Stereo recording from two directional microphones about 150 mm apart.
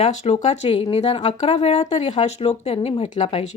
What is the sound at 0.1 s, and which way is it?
Speech, 50° left (ahead or behind).